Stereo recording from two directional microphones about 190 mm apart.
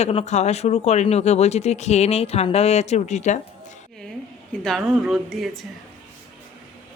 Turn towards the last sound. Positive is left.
turn(degrees=0)  # may be behind; listen again after turning